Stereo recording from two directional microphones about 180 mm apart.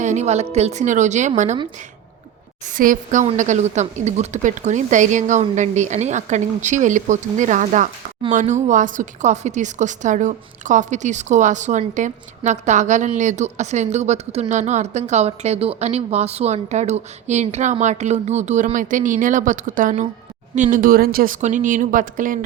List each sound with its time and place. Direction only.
0.0 s a woman's voice: 40° right (ahead or behind)
2.7 s a woman's voice: 50° right (ahead or behind)